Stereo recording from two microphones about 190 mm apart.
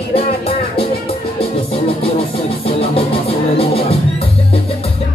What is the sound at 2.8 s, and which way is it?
Music, 30° left (ahead or behind).